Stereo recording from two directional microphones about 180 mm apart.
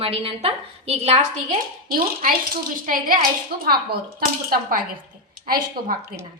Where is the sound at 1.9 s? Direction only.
55° right (ahead or behind).